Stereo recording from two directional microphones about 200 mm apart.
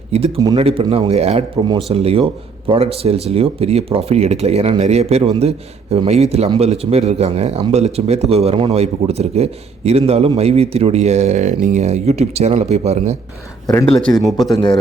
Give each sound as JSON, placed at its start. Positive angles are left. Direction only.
{"t": 0.1, "sound": "a man's voice", "side_deg": -30}
{"t": 13.8, "sound": "speech", "side_deg": 5}